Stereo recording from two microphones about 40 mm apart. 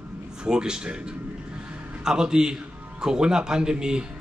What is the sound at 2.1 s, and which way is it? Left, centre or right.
A man's voice, centre.